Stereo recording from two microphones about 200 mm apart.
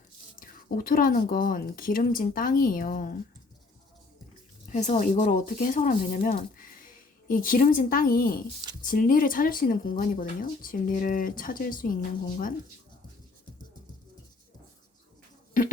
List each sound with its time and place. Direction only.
0.3 s speech: 45° left (ahead or behind)
4.7 s a woman's voice: 35° left (ahead or behind)